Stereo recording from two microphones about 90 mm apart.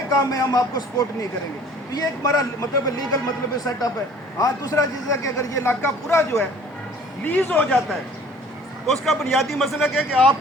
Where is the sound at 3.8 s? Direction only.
45° left (ahead or behind).